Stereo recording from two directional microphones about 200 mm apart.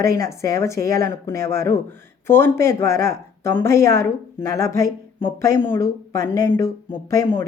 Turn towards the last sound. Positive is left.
turn(degrees=15)  # may be behind; listen again after turning